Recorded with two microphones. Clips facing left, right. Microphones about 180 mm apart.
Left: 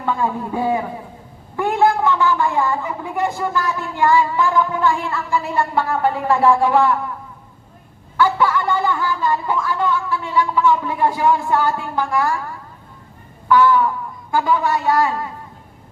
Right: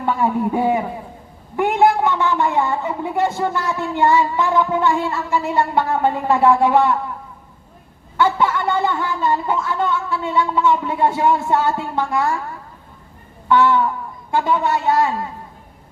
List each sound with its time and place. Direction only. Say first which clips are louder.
0.0 s a woman's voice: right 3 dB; 20° right (ahead or behind)
8.1 s a sound: left 1 dB; 25° right (ahead or behind)
13.5 s a woman's voice: left 1 dB; 25° right (ahead or behind)